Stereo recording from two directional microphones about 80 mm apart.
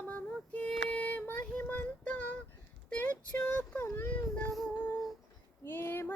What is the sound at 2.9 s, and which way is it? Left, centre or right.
Child singing, centre.